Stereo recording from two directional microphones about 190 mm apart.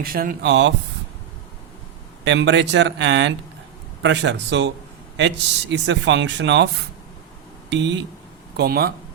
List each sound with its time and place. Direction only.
0.0 s speech: 50° right (ahead or behind); by 0.7 s 65° right (ahead or behind)
2.2 s speech: 70° right (ahead or behind)
7.7 s speech: 70° right (ahead or behind)
8.5 s speech: 55° right (ahead or behind)